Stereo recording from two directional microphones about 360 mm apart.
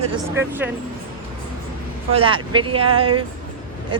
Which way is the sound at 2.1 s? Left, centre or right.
Centre.